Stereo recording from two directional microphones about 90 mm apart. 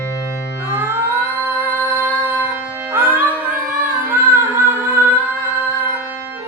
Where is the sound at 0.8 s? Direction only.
25° right (ahead or behind).